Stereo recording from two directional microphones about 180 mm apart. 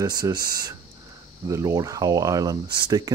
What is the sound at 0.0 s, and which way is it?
Speech, 20° right (ahead or behind).